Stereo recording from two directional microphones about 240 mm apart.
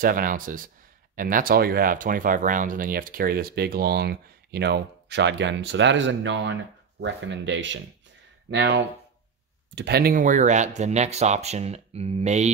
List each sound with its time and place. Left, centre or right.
0.0 s speech: right